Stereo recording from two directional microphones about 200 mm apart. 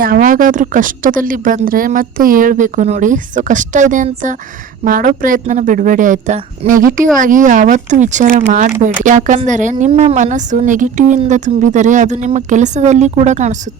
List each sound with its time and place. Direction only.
0.0 s speech: 45° right (ahead or behind)